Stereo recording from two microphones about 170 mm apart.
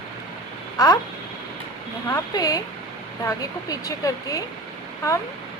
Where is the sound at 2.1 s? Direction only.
25° left (ahead or behind).